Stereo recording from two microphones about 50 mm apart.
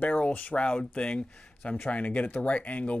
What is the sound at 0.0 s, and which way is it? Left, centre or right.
Speech, left.